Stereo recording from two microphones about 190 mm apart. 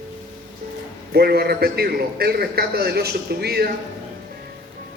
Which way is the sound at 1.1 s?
55° right (ahead or behind).